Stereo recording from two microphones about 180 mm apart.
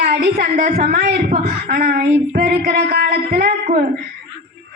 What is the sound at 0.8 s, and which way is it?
A man's voice, 60° right (ahead or behind).